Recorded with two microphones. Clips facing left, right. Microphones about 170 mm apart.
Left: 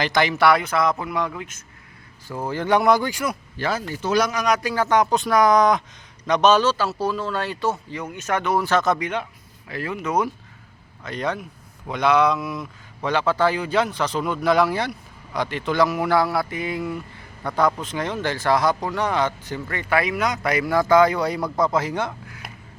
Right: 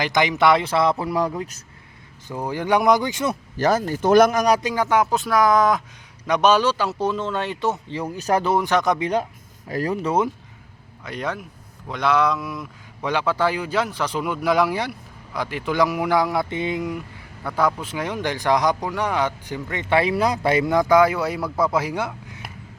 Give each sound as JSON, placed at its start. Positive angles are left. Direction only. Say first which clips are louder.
{"t": 0.0, "sound": "speech", "louder": "even", "side_deg": -15}
{"t": 2.2, "sound": "speech", "louder": "even", "side_deg": -15}
{"t": 3.6, "sound": "speech", "louder": "right 6 dB", "side_deg": -45}
{"t": 4.6, "sound": "speech", "louder": "even", "side_deg": -15}
{"t": 7.9, "sound": "speech", "louder": "right 4 dB", "side_deg": -35}
{"t": 8.5, "sound": "speech", "louder": "even", "side_deg": -15}
{"t": 9.0, "sound": "speech", "louder": "right 4 dB", "side_deg": -35}
{"t": 11.0, "sound": "speech", "louder": "left 2 dB", "side_deg": -10}
{"t": 13.1, "sound": "speech", "louder": "left 1 dB", "side_deg": -10}
{"t": 17.4, "sound": "speech", "louder": "left 1 dB", "side_deg": -10}